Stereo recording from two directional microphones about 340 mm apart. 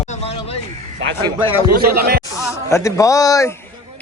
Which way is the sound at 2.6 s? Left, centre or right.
Centre.